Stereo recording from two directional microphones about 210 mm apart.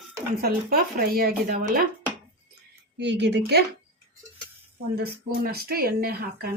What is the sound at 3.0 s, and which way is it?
Speech, 55° right (ahead or behind).